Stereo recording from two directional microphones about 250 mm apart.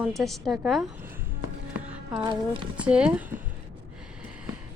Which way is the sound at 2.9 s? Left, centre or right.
Centre.